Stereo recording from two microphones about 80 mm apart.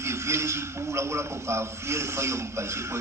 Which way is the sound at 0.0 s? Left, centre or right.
Right.